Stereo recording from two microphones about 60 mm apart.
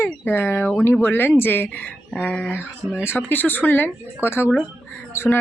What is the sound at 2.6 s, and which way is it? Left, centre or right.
A woman's voice, left.